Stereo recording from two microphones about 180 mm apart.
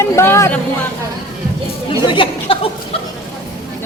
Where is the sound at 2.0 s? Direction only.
30° left (ahead or behind).